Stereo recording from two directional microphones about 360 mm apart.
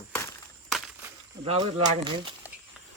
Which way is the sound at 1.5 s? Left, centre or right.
Centre.